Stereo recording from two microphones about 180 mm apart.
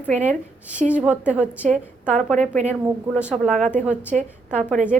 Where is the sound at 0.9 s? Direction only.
5° right (ahead or behind).